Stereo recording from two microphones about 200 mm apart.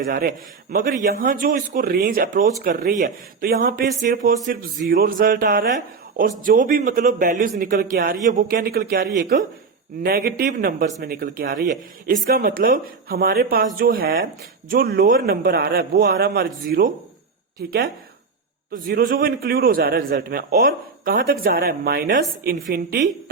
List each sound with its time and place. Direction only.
0.1 s a man's voice: 50° right (ahead or behind)